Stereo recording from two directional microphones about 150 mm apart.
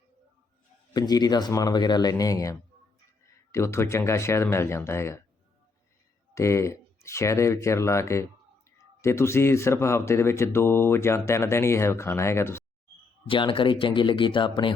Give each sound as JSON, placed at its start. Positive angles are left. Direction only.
{"t": 0.9, "sound": "speech", "side_deg": 25}
{"t": 6.3, "sound": "speech", "side_deg": 20}
{"t": 13.2, "sound": "speech", "side_deg": 35}